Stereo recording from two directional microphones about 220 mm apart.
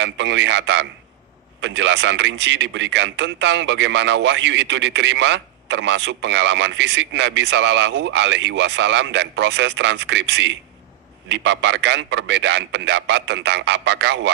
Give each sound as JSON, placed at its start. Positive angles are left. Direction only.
{"t": 0.0, "sound": "a man's voice", "side_deg": -55}